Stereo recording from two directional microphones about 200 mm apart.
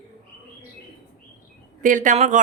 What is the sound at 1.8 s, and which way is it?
Speech, 40° right (ahead or behind).